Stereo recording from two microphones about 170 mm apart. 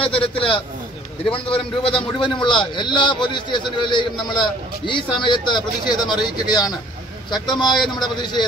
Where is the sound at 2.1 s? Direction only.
30° left (ahead or behind).